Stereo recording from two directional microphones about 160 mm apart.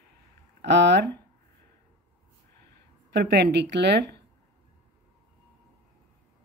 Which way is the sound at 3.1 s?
90° right.